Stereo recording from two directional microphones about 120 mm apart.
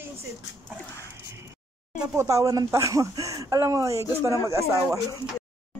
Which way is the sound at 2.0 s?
25° right (ahead or behind).